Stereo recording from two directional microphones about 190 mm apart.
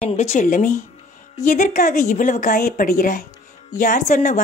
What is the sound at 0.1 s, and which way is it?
A woman's voice, 40° left (ahead or behind).